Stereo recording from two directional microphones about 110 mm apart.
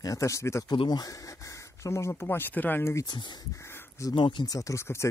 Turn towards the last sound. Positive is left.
turn(degrees=25)  # may be behind; listen again after turning